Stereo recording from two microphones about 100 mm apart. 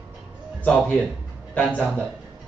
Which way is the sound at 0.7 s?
15° left (ahead or behind).